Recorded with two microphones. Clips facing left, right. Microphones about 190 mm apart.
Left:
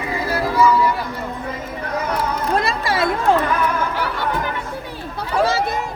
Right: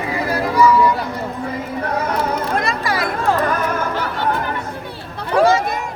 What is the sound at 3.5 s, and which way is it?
Chatter, 45° right (ahead or behind).